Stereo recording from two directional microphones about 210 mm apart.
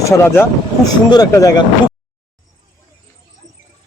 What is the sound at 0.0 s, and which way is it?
Speech, 15° left (ahead or behind).